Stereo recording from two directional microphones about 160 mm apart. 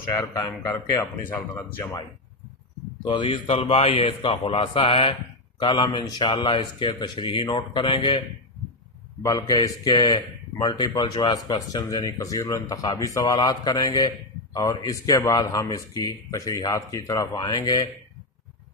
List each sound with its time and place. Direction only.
0.1 s a man's voice: 25° left (ahead or behind)
3.0 s a man's voice: 30° left (ahead or behind)
9.2 s a man's voice: 20° left (ahead or behind)